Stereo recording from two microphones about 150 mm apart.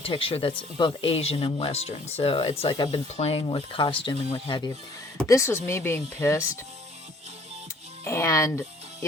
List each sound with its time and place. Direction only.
0.0 s speech: 35° left (ahead or behind)
5.1 s speech: 20° left (ahead or behind)
8.0 s speech: 20° left (ahead or behind)